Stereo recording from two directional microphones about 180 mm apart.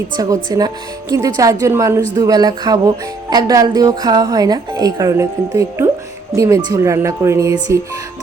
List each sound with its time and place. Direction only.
0.2 s speech: 20° right (ahead or behind)
1.4 s speech: 20° right (ahead or behind)